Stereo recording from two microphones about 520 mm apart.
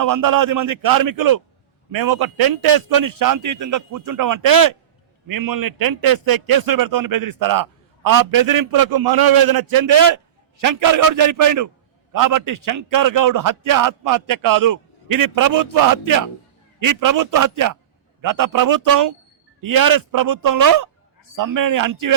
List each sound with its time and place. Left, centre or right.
0.0 s a man's voice: right